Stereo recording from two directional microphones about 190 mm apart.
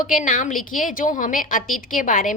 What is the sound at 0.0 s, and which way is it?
A woman's voice, 45° left (ahead or behind).